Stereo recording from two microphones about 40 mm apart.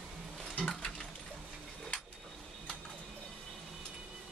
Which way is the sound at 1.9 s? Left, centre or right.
Left.